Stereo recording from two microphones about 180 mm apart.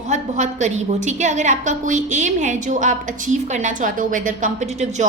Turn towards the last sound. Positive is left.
turn(degrees=-40)  # may be behind; listen again after turning